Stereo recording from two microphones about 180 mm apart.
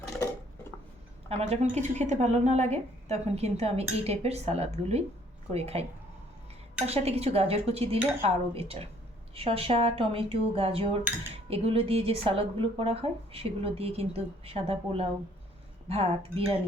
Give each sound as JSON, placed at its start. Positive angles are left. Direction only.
{"t": 1.3, "sound": "a woman's voice", "side_deg": -35}
{"t": 6.8, "sound": "a woman's voice", "side_deg": -35}